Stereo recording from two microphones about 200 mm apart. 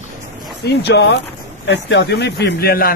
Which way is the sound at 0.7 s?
55° left (ahead or behind).